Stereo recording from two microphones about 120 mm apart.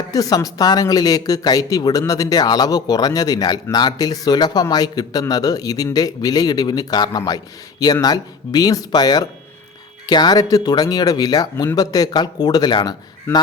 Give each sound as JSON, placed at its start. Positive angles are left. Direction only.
{"t": 0.1, "sound": "speech", "side_deg": 30}